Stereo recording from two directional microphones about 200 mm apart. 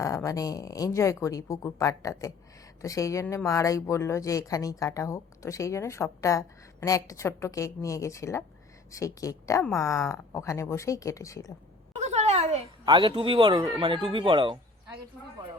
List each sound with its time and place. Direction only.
0.0 s speech: 15° left (ahead or behind)
11.9 s a sound: 35° right (ahead or behind)
12.8 s speech: 25° right (ahead or behind)
15.2 s speech: 5° left (ahead or behind)